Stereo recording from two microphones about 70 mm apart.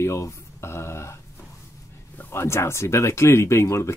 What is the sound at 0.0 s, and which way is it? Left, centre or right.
Speech, left.